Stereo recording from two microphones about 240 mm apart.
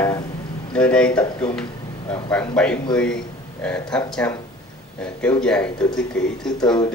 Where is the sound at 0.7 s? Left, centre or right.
Centre.